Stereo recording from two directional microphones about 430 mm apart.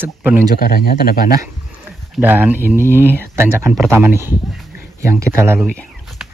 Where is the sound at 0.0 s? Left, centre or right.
Centre.